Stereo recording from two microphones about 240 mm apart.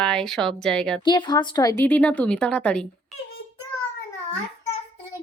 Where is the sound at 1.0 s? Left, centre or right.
Centre.